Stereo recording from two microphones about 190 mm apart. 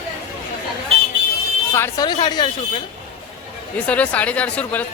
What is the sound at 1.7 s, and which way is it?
Speech, 15° left (ahead or behind).